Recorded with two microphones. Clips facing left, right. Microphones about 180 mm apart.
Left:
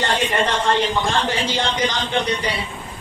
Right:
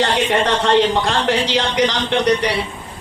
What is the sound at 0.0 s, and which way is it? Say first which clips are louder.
A woman's voice: right 4 dB; 75° right (ahead or behind).